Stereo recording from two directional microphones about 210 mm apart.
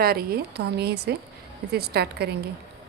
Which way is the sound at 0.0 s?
45° right (ahead or behind).